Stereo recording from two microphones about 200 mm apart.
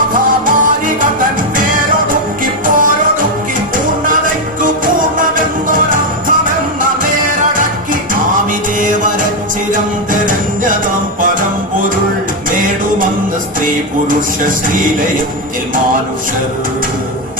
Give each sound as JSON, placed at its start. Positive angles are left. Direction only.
{"t": 0.1, "sound": "music", "side_deg": -45}
{"t": 2.4, "sound": "music", "side_deg": -45}
{"t": 4.6, "sound": "music", "side_deg": -45}
{"t": 8.8, "sound": "music", "side_deg": -40}